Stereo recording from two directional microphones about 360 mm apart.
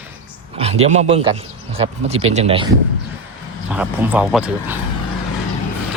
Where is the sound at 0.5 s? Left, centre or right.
Centre.